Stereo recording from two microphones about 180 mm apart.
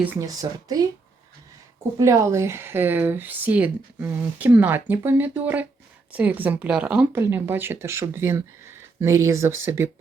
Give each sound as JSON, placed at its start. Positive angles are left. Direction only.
{"t": 0.0, "sound": "speech", "side_deg": -15}
{"t": 2.0, "sound": "speech", "side_deg": -15}